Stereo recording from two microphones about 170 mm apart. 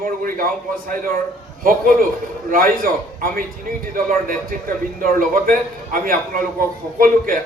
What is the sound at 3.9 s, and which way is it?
A man's voice, 55° right (ahead or behind).